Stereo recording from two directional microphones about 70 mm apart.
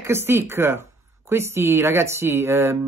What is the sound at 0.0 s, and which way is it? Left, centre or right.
Speech, right.